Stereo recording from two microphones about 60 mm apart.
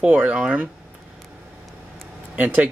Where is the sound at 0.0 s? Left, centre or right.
Right.